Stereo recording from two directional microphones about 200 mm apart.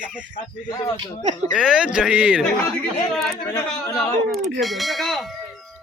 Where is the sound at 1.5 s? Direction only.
5° right (ahead or behind).